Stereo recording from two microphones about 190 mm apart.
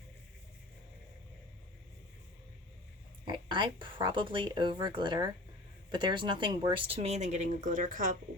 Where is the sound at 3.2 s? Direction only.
25° right (ahead or behind).